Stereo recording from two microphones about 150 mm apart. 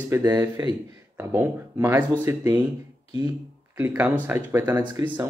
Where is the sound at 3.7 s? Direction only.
15° right (ahead or behind).